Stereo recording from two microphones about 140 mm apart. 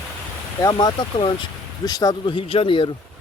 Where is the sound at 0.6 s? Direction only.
25° left (ahead or behind).